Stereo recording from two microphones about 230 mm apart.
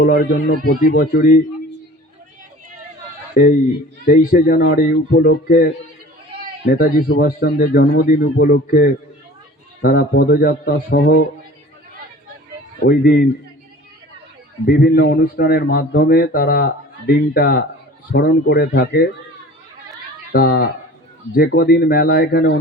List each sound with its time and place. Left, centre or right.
0.0 s a man's voice: left
3.4 s a man's voice: left
6.7 s a man's voice: left
12.8 s a man's voice: left
14.7 s a man's voice: left
20.3 s a man's voice: left